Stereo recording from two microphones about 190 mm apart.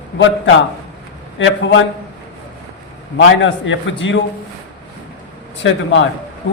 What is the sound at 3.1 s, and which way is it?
A man's voice, 80° left.